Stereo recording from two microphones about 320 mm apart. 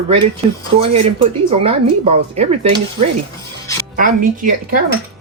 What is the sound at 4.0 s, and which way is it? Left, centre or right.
Speech, right.